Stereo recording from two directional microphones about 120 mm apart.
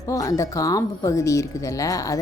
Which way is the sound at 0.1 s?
25° left (ahead or behind).